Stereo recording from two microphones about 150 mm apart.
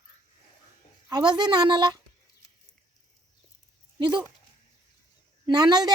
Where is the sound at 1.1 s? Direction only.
30° right (ahead or behind).